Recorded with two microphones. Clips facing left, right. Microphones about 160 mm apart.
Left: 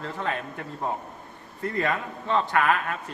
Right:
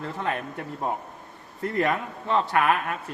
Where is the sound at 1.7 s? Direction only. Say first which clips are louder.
Right 3 dB; 15° right (ahead or behind).